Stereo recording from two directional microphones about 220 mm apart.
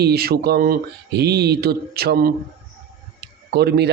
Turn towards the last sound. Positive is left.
turn(degrees=-45)  # may be behind; listen again after turning